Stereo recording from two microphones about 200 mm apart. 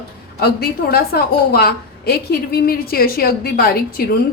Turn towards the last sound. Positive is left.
turn(degrees=50)  # may be behind; listen again after turning